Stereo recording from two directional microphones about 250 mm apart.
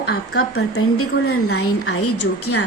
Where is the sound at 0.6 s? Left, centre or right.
Left.